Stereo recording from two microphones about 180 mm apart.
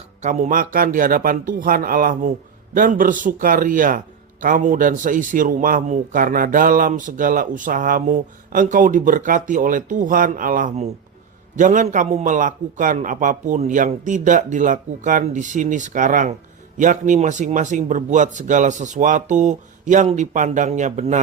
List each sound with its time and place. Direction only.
0.2 s a man's voice: 40° right (ahead or behind)